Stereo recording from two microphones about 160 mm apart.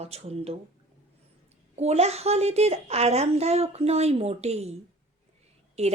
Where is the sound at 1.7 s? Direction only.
40° right (ahead or behind).